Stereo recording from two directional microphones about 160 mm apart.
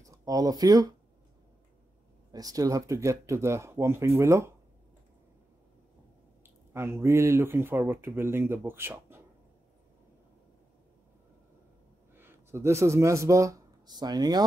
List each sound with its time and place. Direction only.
0.0 s speech: 20° right (ahead or behind)
2.3 s speech: 20° right (ahead or behind)
6.4 s speech: 15° right (ahead or behind)
12.2 s speech: 15° right (ahead or behind)